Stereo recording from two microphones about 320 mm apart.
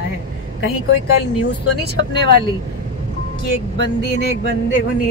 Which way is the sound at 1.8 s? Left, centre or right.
Right.